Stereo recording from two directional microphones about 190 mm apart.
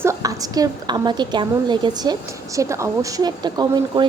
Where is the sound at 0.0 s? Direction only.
15° right (ahead or behind).